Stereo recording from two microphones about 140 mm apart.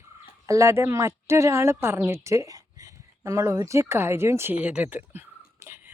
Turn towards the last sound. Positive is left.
turn(degrees=-20)  # may be behind; listen again after turning